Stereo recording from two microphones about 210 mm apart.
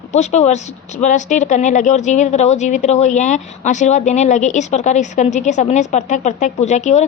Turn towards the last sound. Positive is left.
turn(degrees=35)  # may be behind; listen again after turning